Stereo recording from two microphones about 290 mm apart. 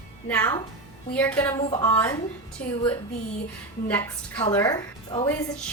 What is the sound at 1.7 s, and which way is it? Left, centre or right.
Speech, centre.